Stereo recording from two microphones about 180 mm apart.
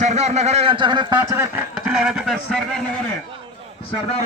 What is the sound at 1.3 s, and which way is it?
A man's voice, 10° right (ahead or behind).